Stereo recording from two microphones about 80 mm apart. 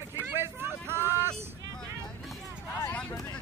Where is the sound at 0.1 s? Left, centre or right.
Right.